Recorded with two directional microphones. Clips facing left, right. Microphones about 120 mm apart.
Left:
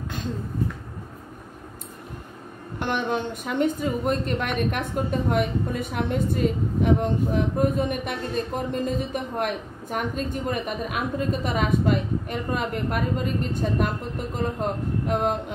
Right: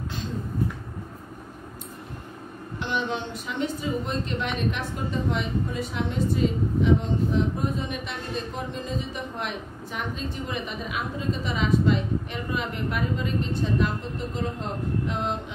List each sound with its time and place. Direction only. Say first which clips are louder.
2.8 s a woman's voice: left 3 dB; 50° left (ahead or behind)